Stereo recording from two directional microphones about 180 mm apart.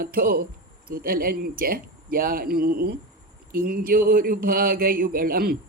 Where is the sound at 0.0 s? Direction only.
55° right (ahead or behind).